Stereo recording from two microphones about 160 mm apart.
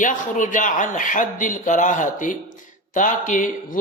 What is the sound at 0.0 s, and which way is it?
Speech, 55° left (ahead or behind).